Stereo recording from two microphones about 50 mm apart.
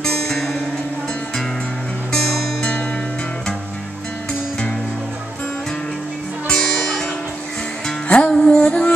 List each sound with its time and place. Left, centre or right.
0.0 s music: centre
6.4 s music: centre
8.1 s music: centre